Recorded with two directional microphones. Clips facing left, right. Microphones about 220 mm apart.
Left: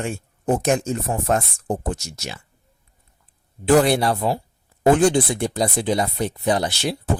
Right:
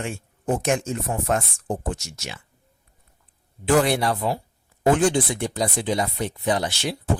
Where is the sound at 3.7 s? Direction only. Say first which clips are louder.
Left 3 dB; 35° left (ahead or behind).